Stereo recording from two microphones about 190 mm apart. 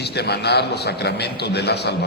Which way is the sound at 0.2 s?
60° left (ahead or behind).